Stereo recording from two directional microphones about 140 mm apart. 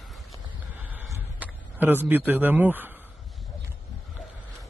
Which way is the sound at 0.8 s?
15° right (ahead or behind).